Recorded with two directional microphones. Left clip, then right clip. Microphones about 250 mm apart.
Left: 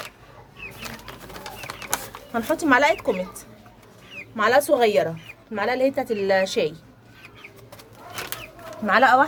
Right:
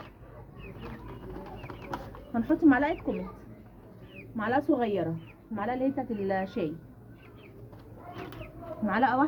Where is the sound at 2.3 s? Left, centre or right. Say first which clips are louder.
Left 5 dB; left.